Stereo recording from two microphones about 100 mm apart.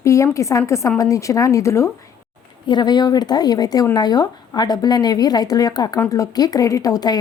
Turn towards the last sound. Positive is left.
turn(degrees=40)  # may be behind; listen again after turning